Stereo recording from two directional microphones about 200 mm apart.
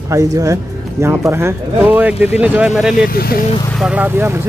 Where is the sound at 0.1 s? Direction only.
15° right (ahead or behind).